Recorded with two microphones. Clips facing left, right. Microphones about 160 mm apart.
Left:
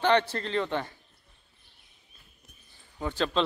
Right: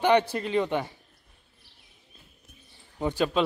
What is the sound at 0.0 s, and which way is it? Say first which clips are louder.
Speech: right 2 dB; 15° right (ahead or behind).